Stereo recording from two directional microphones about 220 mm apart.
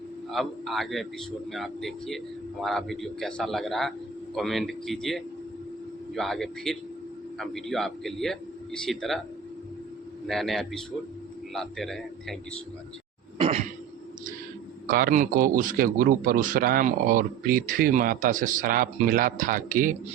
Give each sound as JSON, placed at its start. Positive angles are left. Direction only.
{"t": 0.3, "sound": "speech", "side_deg": 0}
{"t": 10.2, "sound": "speech", "side_deg": 0}
{"t": 13.4, "sound": "cough", "side_deg": -30}
{"t": 14.8, "sound": "a man's voice", "side_deg": -40}